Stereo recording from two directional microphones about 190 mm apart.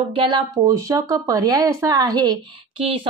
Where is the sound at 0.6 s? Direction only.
20° right (ahead or behind).